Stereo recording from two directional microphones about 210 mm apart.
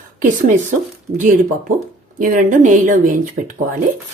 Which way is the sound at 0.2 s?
40° right (ahead or behind).